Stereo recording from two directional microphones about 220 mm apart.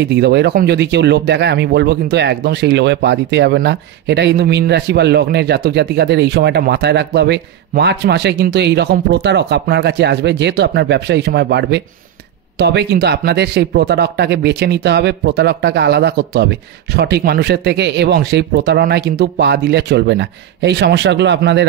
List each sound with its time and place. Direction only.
0.1 s speech: 50° right (ahead or behind)